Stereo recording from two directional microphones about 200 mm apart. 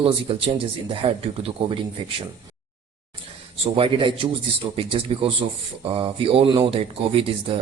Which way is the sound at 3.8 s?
25° right (ahead or behind).